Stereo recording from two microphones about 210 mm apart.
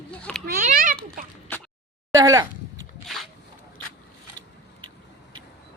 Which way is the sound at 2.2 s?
15° right (ahead or behind).